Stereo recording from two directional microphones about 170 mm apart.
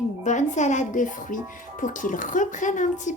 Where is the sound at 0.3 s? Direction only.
45° left (ahead or behind).